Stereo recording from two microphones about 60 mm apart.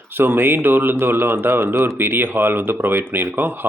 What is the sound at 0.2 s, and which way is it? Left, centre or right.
Speech, right.